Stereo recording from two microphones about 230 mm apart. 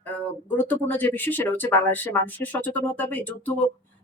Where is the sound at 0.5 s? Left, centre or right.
Centre.